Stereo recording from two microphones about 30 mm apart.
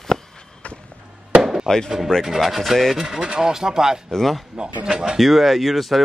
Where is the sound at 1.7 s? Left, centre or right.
Centre.